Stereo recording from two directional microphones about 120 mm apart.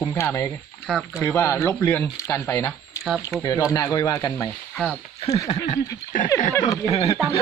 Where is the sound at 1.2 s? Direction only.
20° left (ahead or behind).